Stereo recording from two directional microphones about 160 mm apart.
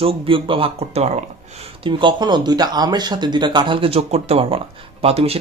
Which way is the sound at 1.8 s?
30° right (ahead or behind).